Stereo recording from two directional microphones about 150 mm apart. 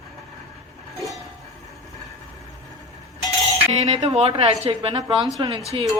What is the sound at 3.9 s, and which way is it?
A woman's voice, 40° right (ahead or behind).